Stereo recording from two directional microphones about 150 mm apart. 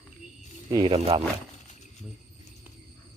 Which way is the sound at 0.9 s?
40° right (ahead or behind).